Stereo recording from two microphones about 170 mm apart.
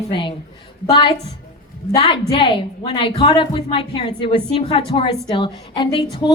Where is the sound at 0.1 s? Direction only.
30° left (ahead or behind).